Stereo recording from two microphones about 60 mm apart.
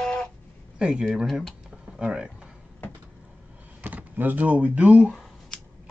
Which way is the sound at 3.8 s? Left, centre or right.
Right.